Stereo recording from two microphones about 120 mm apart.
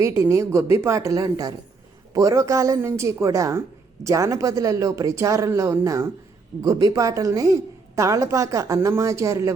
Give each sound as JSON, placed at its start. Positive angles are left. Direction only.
{"t": 0.0, "sound": "a woman's voice", "side_deg": -25}